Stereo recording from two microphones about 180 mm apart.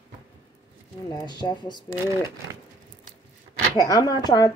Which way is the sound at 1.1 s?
25° left (ahead or behind).